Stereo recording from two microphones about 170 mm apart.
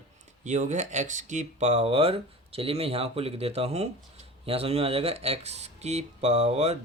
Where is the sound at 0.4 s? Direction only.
45° right (ahead or behind).